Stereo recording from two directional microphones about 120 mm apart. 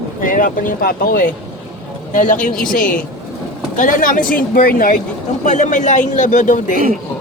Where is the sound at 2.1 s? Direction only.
90° left.